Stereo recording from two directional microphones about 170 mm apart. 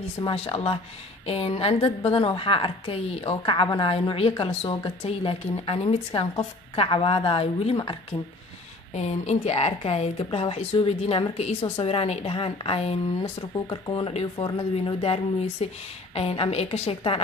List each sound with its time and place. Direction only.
0.2 s a woman's voice: 30° left (ahead or behind)
8.9 s a woman's voice: 40° left (ahead or behind)